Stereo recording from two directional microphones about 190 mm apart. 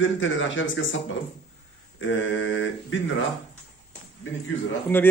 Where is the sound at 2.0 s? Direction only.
90° left.